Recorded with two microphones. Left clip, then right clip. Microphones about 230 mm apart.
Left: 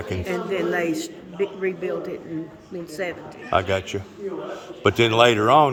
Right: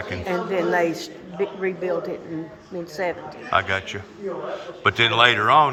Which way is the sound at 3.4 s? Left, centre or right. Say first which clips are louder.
Even; left.